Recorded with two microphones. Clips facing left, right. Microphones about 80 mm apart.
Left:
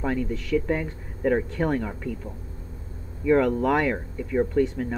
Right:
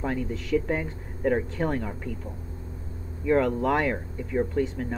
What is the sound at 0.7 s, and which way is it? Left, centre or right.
Speech, centre.